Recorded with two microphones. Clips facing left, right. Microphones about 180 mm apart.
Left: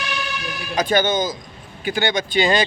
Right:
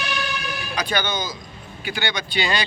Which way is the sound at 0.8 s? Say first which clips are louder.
Left 7 dB; 45° left (ahead or behind).